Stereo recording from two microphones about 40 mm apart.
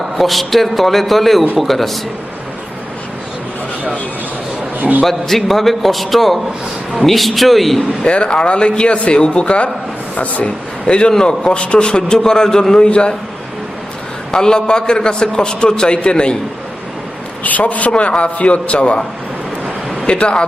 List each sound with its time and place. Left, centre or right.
0.2 s a man's voice: centre
4.8 s a man's voice: right
5.0 s a man's voice: centre
8.0 s a man's voice: left
14.3 s a man's voice: centre
17.4 s a man's voice: left
20.1 s a man's voice: left